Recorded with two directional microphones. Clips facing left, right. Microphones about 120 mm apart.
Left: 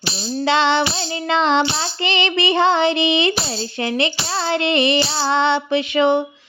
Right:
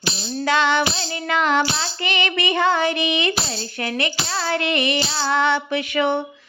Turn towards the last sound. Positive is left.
turn(degrees=25)  # may be behind; listen again after turning